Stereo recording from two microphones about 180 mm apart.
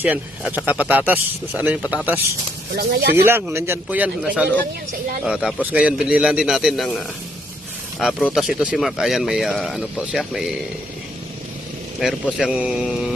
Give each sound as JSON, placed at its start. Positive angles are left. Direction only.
{"t": 0.0, "sound": "speech", "side_deg": -10}
{"t": 2.7, "sound": "speech", "side_deg": -60}
{"t": 3.2, "sound": "speech", "side_deg": -10}
{"t": 11.9, "sound": "speech", "side_deg": 0}